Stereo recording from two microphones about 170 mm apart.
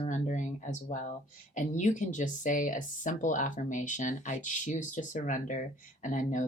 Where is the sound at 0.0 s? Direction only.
45° left (ahead or behind).